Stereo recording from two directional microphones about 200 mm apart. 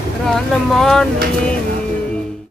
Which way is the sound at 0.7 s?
Centre (ahead or behind).